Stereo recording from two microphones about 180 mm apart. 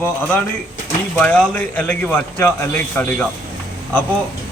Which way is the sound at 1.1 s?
10° left (ahead or behind).